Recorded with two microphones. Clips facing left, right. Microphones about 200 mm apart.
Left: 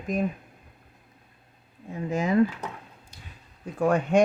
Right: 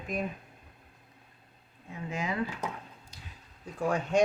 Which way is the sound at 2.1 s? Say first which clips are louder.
Left 8 dB; 40° left (ahead or behind).